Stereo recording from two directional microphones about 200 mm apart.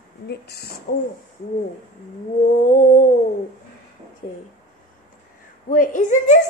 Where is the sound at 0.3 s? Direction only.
55° left (ahead or behind).